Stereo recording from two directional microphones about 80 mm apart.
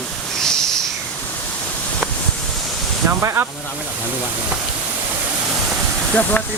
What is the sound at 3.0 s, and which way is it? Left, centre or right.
Speech, right.